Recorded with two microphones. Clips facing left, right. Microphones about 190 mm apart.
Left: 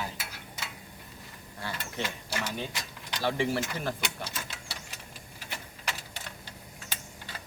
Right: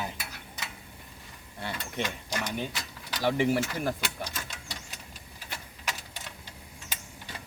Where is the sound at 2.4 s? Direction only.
15° right (ahead or behind).